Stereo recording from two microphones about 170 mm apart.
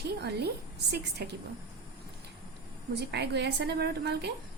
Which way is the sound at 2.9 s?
80° right.